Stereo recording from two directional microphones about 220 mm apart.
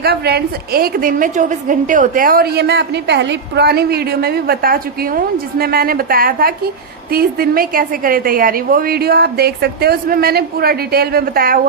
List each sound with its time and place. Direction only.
0.0 s a woman's voice: 45° right (ahead or behind)